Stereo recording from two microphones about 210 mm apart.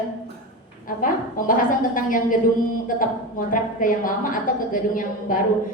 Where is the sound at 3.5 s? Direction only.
40° left (ahead or behind).